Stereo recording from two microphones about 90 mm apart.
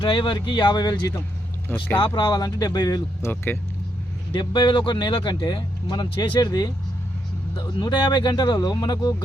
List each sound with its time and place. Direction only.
0.0 s speech: 70° left (ahead or behind); by 0.9 s 55° left (ahead or behind)
2.0 s speech: 60° left (ahead or behind); by 3.2 s 45° left (ahead or behind)
3.2 s speech: 25° left (ahead or behind)
4.3 s speech: 65° left (ahead or behind); by 6.7 s 50° left (ahead or behind)
7.8 s speech: 60° left (ahead or behind)